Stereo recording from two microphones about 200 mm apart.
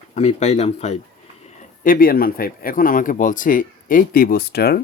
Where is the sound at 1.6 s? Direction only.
45° left (ahead or behind).